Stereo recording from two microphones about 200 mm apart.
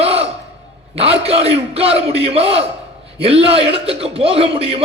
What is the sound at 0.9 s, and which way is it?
A man's voice, 30° right (ahead or behind).